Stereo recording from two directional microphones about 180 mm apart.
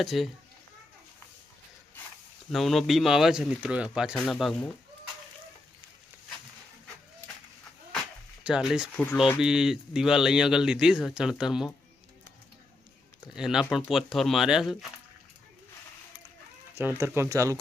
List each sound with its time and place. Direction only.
0.0 s speech: centre (ahead or behind)
2.5 s speech: centre (ahead or behind)
8.4 s speech: 5° right (ahead or behind)
13.3 s speech: 5° right (ahead or behind)
16.7 s speech: 10° right (ahead or behind)